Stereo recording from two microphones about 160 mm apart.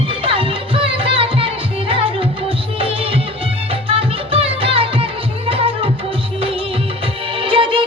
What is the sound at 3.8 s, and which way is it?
Music, 35° right (ahead or behind).